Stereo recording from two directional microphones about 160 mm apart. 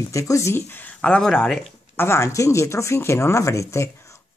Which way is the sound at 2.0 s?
15° left (ahead or behind).